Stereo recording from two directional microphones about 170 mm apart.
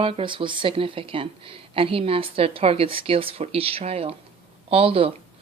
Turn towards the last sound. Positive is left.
turn(degrees=-35)  # may be behind; listen again after turning